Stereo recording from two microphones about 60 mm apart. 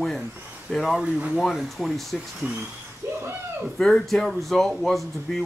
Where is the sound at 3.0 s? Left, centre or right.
Right.